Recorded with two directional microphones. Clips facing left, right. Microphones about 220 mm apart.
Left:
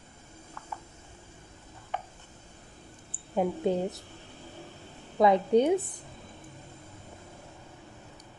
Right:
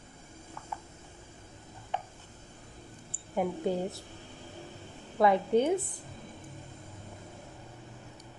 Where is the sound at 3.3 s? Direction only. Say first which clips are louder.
Left 3 dB; 20° left (ahead or behind).